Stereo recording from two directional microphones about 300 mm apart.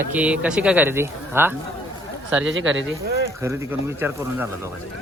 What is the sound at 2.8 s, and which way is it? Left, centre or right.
Speech, right.